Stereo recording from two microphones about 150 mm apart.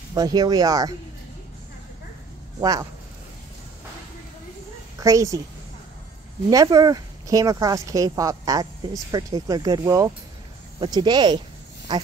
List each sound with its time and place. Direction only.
0.1 s speech: 25° right (ahead or behind)
2.6 s speech: 25° right (ahead or behind)
5.0 s speech: 20° right (ahead or behind)
6.5 s speech: 25° right (ahead or behind)